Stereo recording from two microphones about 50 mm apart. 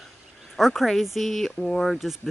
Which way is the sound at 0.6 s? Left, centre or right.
Centre.